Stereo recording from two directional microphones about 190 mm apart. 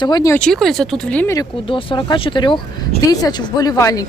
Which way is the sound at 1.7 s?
25° left (ahead or behind).